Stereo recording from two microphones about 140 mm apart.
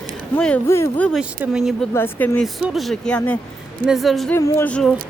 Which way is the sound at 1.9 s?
15° left (ahead or behind).